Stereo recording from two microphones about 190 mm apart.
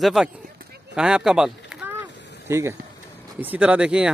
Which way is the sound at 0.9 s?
5° right (ahead or behind).